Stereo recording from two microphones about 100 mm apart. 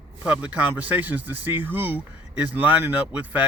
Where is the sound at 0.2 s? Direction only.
15° right (ahead or behind).